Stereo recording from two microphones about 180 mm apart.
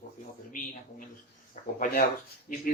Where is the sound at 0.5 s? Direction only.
45° left (ahead or behind).